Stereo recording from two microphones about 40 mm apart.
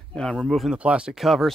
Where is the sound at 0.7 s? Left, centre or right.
Right.